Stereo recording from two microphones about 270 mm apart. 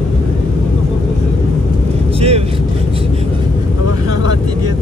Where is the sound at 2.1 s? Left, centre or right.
Right.